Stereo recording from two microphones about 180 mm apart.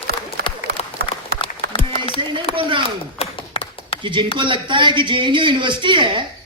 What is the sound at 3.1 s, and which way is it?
Tap, 30° left (ahead or behind).